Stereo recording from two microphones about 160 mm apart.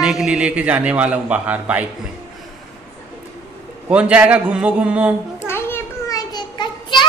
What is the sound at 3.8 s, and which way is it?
A man's voice, 10° right (ahead or behind).